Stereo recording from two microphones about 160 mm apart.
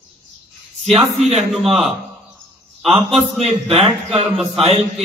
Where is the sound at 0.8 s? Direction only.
40° right (ahead or behind).